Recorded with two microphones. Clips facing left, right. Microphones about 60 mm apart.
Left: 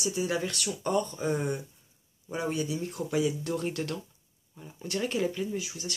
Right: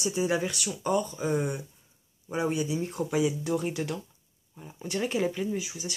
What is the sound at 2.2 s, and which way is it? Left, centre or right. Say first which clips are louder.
Speech: right 2 dB; centre.